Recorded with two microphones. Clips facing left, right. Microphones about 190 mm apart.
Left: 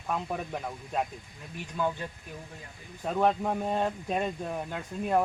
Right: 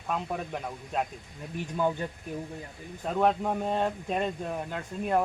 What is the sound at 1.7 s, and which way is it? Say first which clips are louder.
Speech: right 2 dB; 15° right (ahead or behind).